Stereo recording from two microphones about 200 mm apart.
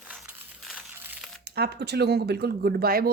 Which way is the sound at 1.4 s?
55° right (ahead or behind).